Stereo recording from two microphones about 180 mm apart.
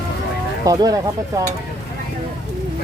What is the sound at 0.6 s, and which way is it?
Speech, 20° right (ahead or behind).